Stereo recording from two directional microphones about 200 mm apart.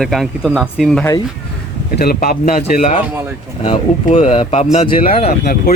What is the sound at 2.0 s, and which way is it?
A man's voice, 45° left (ahead or behind).